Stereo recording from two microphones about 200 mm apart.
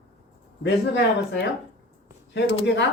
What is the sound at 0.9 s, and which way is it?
Speech, 60° left (ahead or behind).